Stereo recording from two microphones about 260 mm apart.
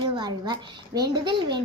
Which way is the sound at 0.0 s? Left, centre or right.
Centre.